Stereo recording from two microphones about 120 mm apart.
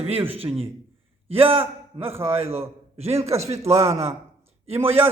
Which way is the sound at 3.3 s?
25° right (ahead or behind).